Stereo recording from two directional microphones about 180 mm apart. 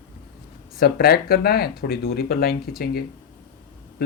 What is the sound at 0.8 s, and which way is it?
Speech, 60° left (ahead or behind).